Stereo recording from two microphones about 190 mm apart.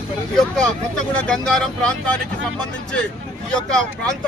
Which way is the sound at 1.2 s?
5° left (ahead or behind).